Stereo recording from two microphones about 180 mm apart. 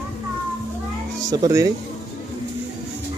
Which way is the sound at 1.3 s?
20° right (ahead or behind).